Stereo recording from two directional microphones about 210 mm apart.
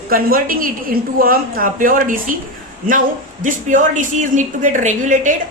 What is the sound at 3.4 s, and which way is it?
A woman's voice, 40° right (ahead or behind).